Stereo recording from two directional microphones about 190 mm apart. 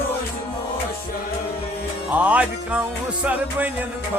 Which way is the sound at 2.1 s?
10° right (ahead or behind).